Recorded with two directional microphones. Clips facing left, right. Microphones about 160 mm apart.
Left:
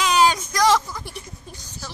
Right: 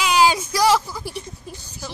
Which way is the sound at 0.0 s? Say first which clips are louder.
Right 1 dB; 10° right (ahead or behind).